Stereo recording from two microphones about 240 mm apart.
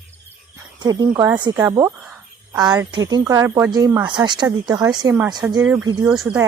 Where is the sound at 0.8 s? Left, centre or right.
Centre.